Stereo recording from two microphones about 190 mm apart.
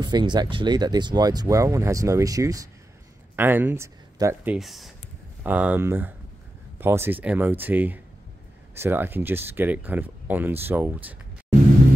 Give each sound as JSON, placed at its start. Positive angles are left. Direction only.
{"t": 0.0, "sound": "speech", "side_deg": -25}
{"t": 4.6, "sound": "speech", "side_deg": 0}